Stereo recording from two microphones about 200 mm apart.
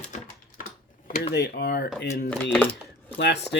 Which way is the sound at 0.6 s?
40° left (ahead or behind).